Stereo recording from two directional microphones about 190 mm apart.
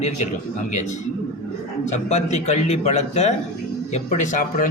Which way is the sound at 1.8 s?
40° left (ahead or behind).